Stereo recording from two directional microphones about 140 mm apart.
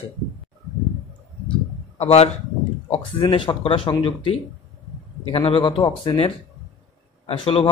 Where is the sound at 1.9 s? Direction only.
50° left (ahead or behind).